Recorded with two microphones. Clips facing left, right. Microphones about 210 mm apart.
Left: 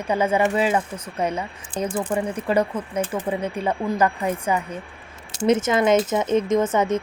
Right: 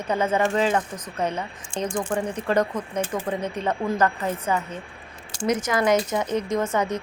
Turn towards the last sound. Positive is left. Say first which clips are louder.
# left 4 dB
turn(degrees=20)  # may be behind; listen again after turning